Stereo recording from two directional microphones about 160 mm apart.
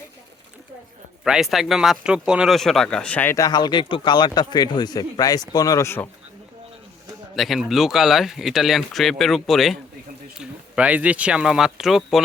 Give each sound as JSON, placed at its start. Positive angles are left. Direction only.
{"t": 1.2, "sound": "speech", "side_deg": -5}
{"t": 7.3, "sound": "speech", "side_deg": 0}